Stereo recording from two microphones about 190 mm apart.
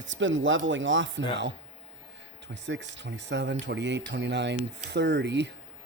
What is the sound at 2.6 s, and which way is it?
Speech, 70° right (ahead or behind).